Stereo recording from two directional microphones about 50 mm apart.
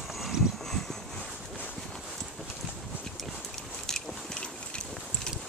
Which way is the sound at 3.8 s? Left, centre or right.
Centre.